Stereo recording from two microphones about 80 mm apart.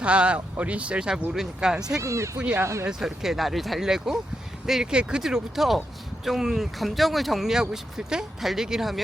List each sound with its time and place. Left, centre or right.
0.0 s speech: centre
2.0 s speech: right
3.0 s speech: centre